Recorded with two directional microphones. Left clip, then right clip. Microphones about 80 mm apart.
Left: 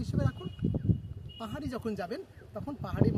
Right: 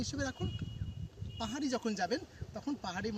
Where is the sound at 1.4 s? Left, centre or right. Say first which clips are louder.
Right 2 dB; left.